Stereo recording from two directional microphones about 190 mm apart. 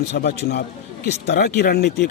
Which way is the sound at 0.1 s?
60° left (ahead or behind).